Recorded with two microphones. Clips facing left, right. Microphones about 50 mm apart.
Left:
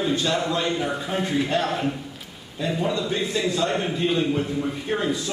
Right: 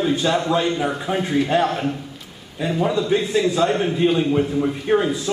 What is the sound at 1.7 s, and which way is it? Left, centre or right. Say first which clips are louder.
Speech: right 2 dB; centre.